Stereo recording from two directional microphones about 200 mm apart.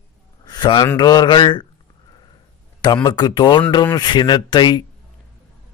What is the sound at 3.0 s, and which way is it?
Speech, 20° left (ahead or behind).